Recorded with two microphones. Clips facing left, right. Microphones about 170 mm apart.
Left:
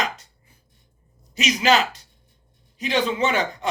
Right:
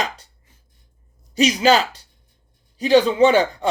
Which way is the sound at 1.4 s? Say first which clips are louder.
Right 4 dB; 30° right (ahead or behind).